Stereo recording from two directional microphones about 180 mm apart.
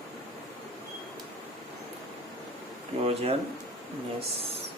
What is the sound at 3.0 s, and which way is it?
Speech, 35° right (ahead or behind).